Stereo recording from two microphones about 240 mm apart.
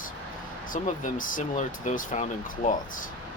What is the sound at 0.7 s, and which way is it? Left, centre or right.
Speech, left.